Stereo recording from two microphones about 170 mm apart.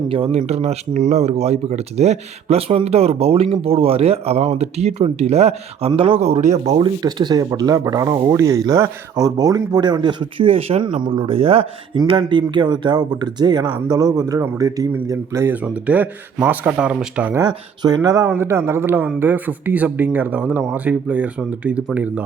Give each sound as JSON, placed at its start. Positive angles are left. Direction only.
{"t": 0.1, "sound": "speech", "side_deg": -35}
{"t": 6.7, "sound": "speech", "side_deg": -25}
{"t": 17.3, "sound": "speech", "side_deg": -25}